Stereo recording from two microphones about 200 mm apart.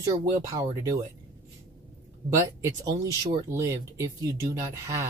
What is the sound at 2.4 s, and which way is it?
Speech, 15° right (ahead or behind).